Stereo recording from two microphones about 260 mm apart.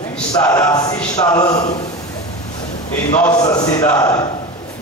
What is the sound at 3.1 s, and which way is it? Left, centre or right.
A man's voice, centre.